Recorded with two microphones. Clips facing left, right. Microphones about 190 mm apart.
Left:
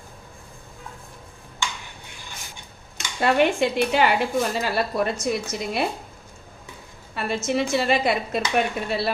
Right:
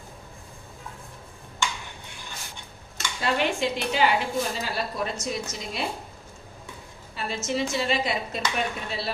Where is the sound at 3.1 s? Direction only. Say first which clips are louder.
Left 6 dB; 55° left (ahead or behind).